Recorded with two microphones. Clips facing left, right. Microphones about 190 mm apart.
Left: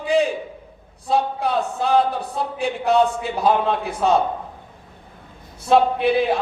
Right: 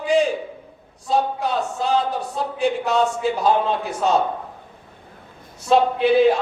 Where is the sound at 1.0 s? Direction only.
55° left (ahead or behind).